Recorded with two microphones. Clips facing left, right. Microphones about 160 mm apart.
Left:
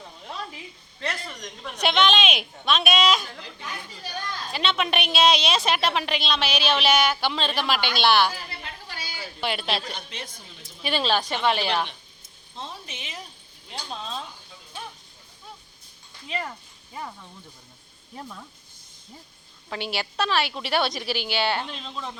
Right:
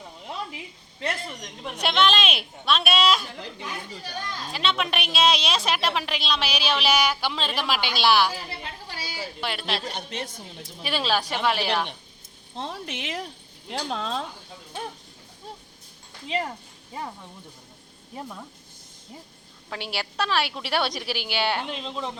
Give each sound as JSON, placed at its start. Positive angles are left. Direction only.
{"t": 1.8, "sound": "a woman's voice", "side_deg": -5}
{"t": 4.5, "sound": "a woman's voice", "side_deg": 0}
{"t": 8.4, "sound": "a sound", "side_deg": -30}
{"t": 9.4, "sound": "a woman's voice", "side_deg": 0}
{"t": 9.8, "sound": "a woman's voice", "side_deg": -45}
{"t": 10.8, "sound": "a woman's voice", "side_deg": -5}
{"t": 12.5, "sound": "speech", "side_deg": -70}
{"t": 16.2, "sound": "speech", "side_deg": -25}
{"t": 18.2, "sound": "speech", "side_deg": -15}
{"t": 19.7, "sound": "speech", "side_deg": -10}